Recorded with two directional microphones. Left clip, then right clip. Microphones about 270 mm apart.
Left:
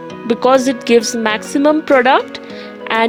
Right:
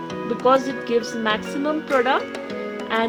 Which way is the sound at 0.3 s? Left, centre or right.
Left.